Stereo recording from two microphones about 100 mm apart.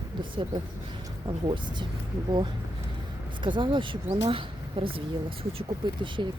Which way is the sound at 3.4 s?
55° right (ahead or behind).